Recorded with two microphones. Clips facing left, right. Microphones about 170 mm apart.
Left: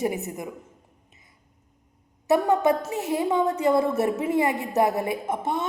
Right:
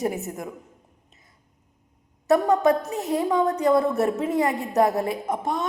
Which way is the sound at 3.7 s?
20° left (ahead or behind).